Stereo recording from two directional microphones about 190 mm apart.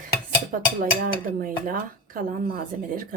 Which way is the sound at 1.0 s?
45° right (ahead or behind).